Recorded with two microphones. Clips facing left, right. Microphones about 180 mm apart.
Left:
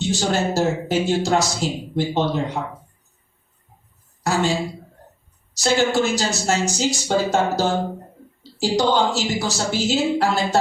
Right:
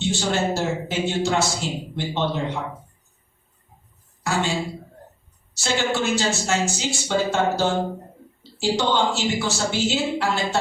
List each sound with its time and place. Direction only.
0.0 s a man's voice: 40° left (ahead or behind)
4.2 s a woman's voice: 40° left (ahead or behind)
5.5 s a man's voice: 40° left (ahead or behind)
8.7 s a man's voice: 40° left (ahead or behind)